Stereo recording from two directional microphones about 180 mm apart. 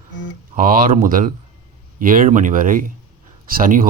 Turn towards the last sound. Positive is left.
turn(degrees=-50)  # may be behind; listen again after turning